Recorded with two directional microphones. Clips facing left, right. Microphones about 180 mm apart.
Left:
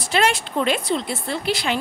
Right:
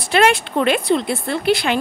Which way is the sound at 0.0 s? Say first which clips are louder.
Right 5 dB; 60° right (ahead or behind).